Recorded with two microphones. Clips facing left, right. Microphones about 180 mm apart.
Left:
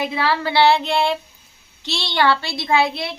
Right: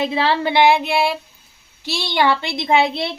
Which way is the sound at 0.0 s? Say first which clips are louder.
Right 3 dB; 25° right (ahead or behind).